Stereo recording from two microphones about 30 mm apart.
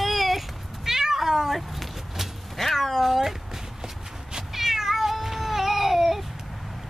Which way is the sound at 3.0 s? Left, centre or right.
Centre.